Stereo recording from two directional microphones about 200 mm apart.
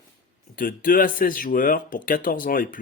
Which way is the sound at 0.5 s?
45° left (ahead or behind).